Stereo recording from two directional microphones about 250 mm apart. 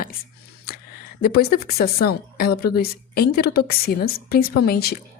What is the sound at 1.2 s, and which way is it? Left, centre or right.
A woman's voice, left.